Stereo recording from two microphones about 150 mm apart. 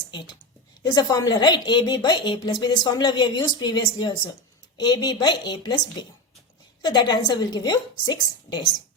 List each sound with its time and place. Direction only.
0.1 s a woman's voice: 30° left (ahead or behind)